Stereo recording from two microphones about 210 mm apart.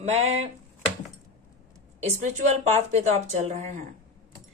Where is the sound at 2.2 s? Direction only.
35° right (ahead or behind).